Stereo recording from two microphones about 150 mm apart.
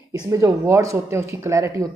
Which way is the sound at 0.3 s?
20° right (ahead or behind).